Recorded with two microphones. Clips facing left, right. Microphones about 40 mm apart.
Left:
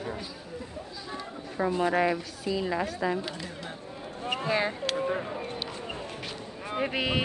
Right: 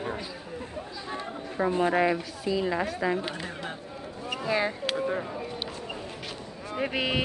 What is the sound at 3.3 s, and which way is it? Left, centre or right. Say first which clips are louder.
Speech: right 3 dB; right.